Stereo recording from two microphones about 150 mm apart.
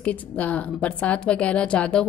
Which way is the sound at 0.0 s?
10° left (ahead or behind).